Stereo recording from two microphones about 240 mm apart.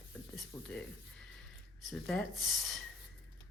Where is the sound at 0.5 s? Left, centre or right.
Centre.